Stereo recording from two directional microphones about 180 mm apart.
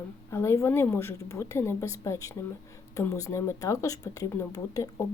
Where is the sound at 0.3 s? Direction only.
15° left (ahead or behind).